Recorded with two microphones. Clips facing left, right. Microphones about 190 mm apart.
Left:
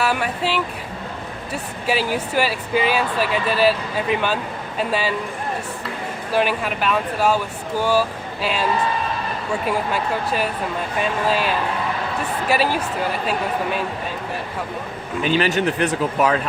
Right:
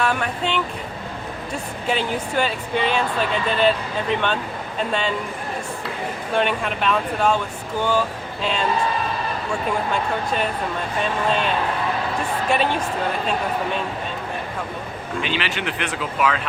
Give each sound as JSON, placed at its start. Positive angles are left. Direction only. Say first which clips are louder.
{"t": 0.0, "sound": "speech", "louder": "left 1 dB", "side_deg": 5}
{"t": 1.9, "sound": "speech", "louder": "left 2 dB", "side_deg": 5}
{"t": 6.3, "sound": "speech", "louder": "left 2 dB", "side_deg": 5}
{"t": 9.6, "sound": "speech", "louder": "left 1 dB", "side_deg": 5}
{"t": 15.2, "sound": "speech", "louder": "left 8 dB", "side_deg": 45}